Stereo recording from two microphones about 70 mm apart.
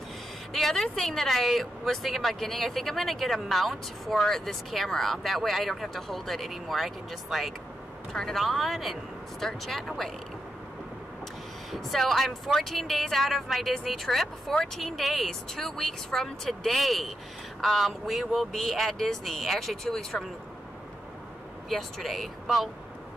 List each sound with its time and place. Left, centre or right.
0.5 s speech: centre
11.7 s speech: centre
21.6 s speech: centre